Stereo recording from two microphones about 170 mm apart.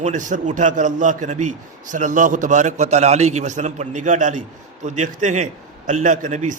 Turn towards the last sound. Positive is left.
turn(degrees=-45)  # may be behind; listen again after turning